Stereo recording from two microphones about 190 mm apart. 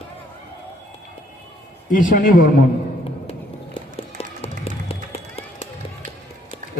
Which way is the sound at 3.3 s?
30° left (ahead or behind).